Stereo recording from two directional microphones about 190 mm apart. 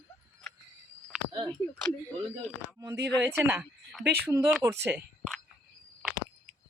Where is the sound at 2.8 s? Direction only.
15° right (ahead or behind).